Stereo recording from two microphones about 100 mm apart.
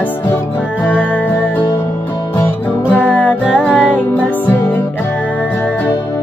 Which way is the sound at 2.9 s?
15° left (ahead or behind).